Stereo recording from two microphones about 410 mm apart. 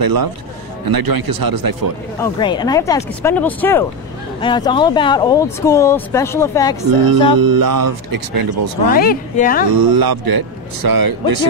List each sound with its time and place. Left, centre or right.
0.0 s a man's voice: right
2.1 s speech: centre
6.9 s speech: right
8.9 s speech: left
9.8 s a man's voice: right